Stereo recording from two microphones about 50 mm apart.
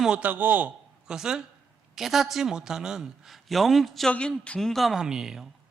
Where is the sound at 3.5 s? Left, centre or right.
Centre.